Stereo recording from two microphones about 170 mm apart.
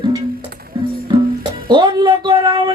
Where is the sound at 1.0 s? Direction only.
30° right (ahead or behind).